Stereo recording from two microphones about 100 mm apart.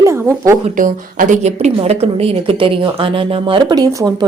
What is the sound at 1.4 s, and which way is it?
Speech, 90° right.